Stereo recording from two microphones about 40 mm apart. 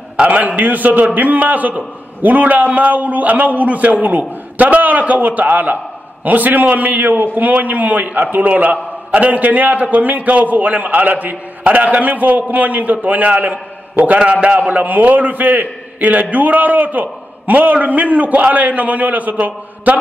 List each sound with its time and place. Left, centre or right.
0.2 s a man's voice: right